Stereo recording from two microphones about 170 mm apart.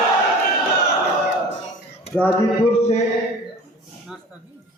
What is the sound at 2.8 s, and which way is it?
Speech, 40° left (ahead or behind).